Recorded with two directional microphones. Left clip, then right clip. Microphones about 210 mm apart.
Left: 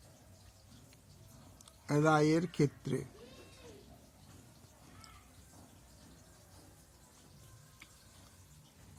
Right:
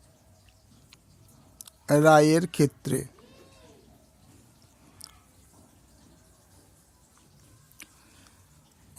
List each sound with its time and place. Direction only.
1.5 s speech: 50° right (ahead or behind)
5.0 s a sound: 50° right (ahead or behind)
7.8 s music: 50° right (ahead or behind)